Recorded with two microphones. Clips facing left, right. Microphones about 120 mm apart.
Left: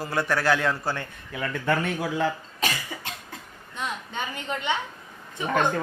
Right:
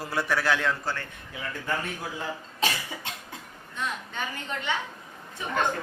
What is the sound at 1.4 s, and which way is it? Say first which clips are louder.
Speech: left 6 dB; 80° left.